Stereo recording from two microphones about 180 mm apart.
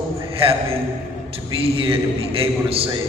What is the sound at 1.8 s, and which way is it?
A man's voice, 30° right (ahead or behind).